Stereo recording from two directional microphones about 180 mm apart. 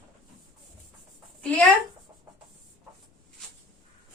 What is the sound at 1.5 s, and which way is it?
Speech, 10° left (ahead or behind).